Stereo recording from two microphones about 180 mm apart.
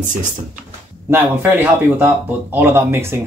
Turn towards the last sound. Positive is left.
turn(degrees=-15)  # may be behind; listen again after turning